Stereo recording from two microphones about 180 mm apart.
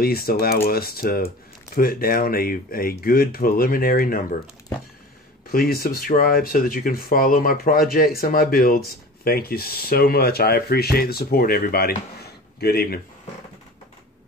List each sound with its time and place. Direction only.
0.0 s speech: 55° left (ahead or behind)
5.5 s speech: 55° left (ahead or behind)